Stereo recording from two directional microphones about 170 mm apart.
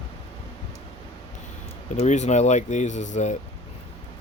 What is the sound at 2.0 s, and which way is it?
Speech, 45° left (ahead or behind).